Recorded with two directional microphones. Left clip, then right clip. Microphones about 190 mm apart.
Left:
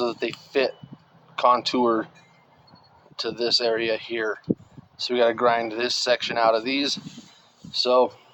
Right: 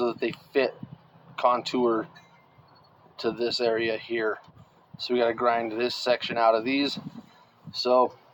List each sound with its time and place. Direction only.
0.0 s speech: 50° left (ahead or behind)
3.2 s speech: 50° left (ahead or behind)